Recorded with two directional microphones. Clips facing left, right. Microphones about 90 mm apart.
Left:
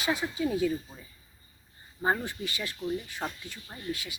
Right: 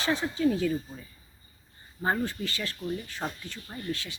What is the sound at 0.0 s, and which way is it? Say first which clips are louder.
Speech: right 3 dB; 15° left (ahead or behind).